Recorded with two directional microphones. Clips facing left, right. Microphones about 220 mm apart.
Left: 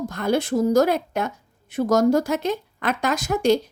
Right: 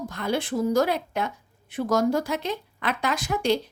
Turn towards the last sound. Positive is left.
turn(degrees=45)  # may be behind; listen again after turning